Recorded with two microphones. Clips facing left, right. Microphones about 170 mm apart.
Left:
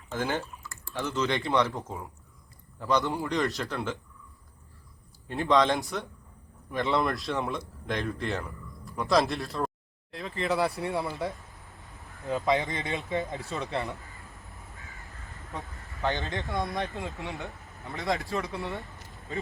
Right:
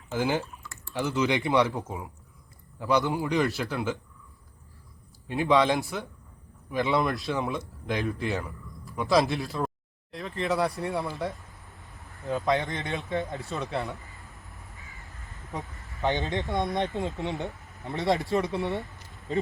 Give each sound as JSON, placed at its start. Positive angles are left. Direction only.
{"t": 0.5, "sound": "typing", "side_deg": 0}
{"t": 0.9, "sound": "speech", "side_deg": -15}
{"t": 5.3, "sound": "speech", "side_deg": -5}
{"t": 11.8, "sound": "a sound", "side_deg": 0}
{"t": 16.0, "sound": "speech", "side_deg": -20}